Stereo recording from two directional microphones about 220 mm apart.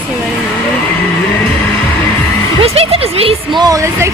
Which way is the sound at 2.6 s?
25° right (ahead or behind).